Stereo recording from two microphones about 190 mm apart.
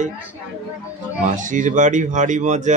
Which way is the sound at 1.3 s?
40° right (ahead or behind).